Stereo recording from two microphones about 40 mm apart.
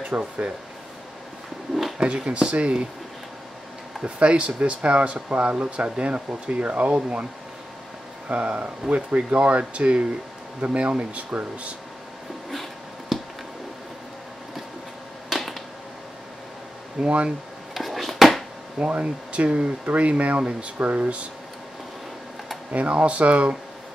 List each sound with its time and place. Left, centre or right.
0.1 s speech: right
2.0 s speech: right
4.0 s speech: right
8.3 s speech: right
13.1 s a sound: centre
15.2 s a sound: centre
17.0 s speech: right
17.7 s a sound: centre
18.8 s speech: right
22.7 s speech: right